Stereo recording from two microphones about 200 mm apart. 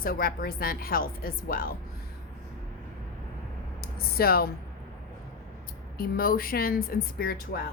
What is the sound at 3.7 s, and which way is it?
Speech, 50° left (ahead or behind).